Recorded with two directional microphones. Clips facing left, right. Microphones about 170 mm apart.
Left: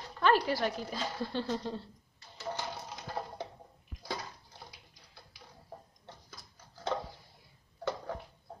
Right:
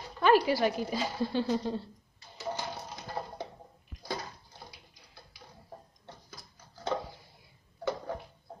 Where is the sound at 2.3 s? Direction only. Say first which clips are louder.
Right 2 dB; 5° right (ahead or behind).